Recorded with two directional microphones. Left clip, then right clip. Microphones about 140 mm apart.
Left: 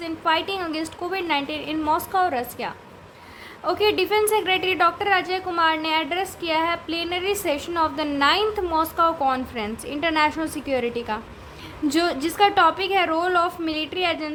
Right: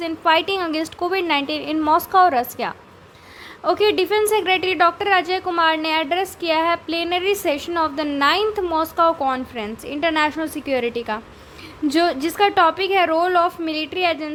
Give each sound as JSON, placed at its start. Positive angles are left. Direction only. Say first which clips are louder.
{"t": 0.0, "sound": "a woman's voice", "louder": "right 5 dB", "side_deg": -40}